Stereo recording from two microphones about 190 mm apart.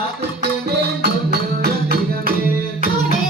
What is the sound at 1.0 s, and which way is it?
Music, 55° right (ahead or behind).